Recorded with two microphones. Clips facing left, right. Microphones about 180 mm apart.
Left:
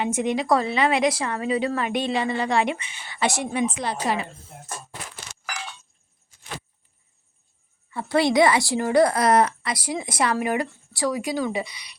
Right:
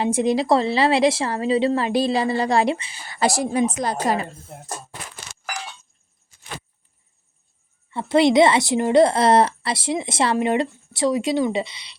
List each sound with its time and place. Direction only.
0.0 s a woman's voice: 35° right (ahead or behind)
7.9 s a woman's voice: 20° right (ahead or behind)